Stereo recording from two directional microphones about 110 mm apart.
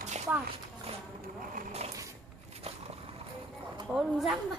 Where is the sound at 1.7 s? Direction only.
75° right (ahead or behind).